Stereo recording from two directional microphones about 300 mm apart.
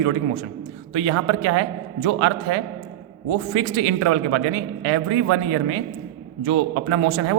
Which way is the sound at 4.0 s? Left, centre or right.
Right.